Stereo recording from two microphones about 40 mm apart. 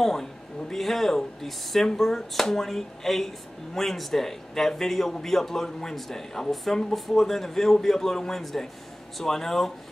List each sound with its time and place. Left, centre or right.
0.0 s speech: centre